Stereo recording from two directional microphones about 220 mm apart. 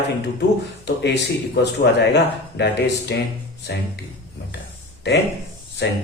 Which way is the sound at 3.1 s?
55° left (ahead or behind).